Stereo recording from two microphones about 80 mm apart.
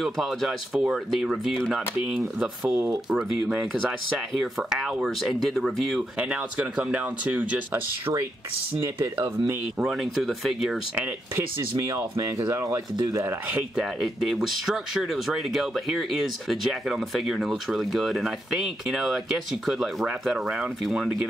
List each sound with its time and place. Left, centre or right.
0.0 s speech: centre
6.1 s speech: centre
9.1 s speech: right
9.8 s speech: centre
11.3 s speech: right
13.7 s speech: centre
20.8 s speech: centre